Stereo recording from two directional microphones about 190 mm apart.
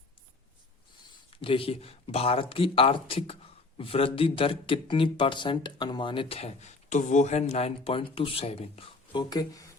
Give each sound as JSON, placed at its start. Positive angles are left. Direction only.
{"t": 1.4, "sound": "speech", "side_deg": 30}